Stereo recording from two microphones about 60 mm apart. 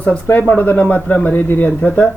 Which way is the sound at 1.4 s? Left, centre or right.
Left.